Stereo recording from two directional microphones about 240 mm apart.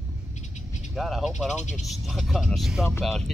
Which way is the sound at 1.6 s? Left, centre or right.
Left.